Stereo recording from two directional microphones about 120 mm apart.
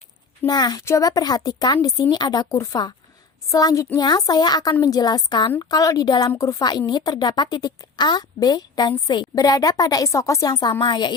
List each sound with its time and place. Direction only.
0.4 s a woman's voice: 35° left (ahead or behind)